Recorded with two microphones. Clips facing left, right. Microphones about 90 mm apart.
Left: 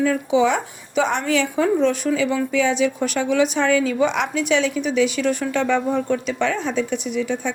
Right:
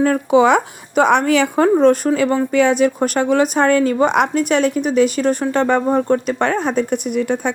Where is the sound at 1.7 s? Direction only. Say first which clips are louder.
Right 6 dB; 45° right (ahead or behind).